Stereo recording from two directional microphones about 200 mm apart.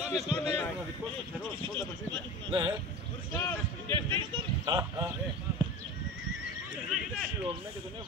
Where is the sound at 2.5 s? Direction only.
25° right (ahead or behind).